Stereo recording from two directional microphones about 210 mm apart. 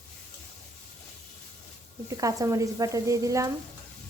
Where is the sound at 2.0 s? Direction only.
15° right (ahead or behind).